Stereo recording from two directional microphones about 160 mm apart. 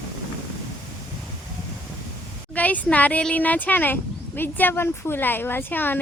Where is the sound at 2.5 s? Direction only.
10° left (ahead or behind).